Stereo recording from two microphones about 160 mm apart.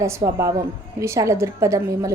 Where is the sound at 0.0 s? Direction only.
20° right (ahead or behind).